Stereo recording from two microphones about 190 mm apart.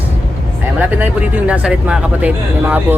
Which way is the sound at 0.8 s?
10° right (ahead or behind).